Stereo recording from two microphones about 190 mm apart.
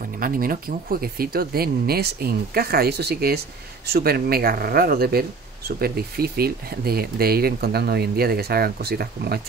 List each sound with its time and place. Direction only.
0.2 s speech: 50° right (ahead or behind)